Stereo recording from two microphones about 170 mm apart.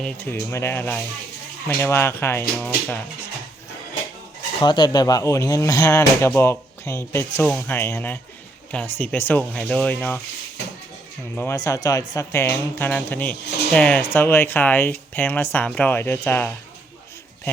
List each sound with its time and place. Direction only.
0.0 s speech: 10° left (ahead or behind)
4.6 s speech: 25° left (ahead or behind); by 10.2 s 5° left (ahead or behind)
11.3 s speech: 15° left (ahead or behind)